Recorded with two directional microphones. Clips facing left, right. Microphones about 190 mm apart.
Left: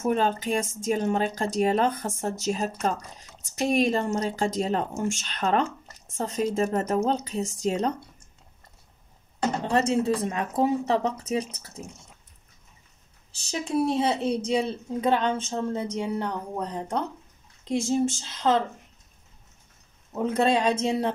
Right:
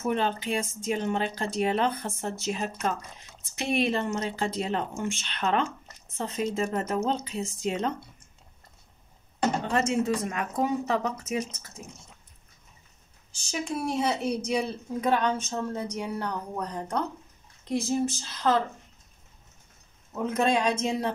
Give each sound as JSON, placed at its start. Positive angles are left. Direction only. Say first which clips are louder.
{"t": 0.0, "sound": "speech", "louder": "left 3 dB", "side_deg": 45}
{"t": 9.7, "sound": "speech", "louder": "left 5 dB", "side_deg": 35}
{"t": 13.8, "sound": "speech", "louder": "left 3 dB", "side_deg": 30}
{"t": 20.2, "sound": "speech", "louder": "left 2 dB", "side_deg": 30}